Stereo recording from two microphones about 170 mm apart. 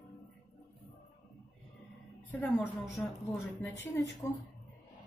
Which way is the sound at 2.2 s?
10° left (ahead or behind).